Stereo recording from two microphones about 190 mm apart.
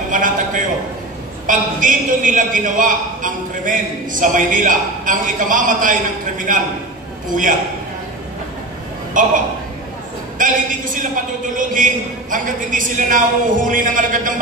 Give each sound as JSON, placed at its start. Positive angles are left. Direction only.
{"t": 0.1, "sound": "a sound", "side_deg": -45}
{"t": 1.5, "sound": "a man's voice", "side_deg": -45}
{"t": 9.1, "sound": "a man's voice", "side_deg": -45}
{"t": 10.4, "sound": "a man's voice", "side_deg": -45}